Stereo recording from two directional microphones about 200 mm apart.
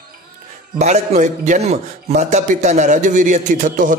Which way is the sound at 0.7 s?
35° right (ahead or behind).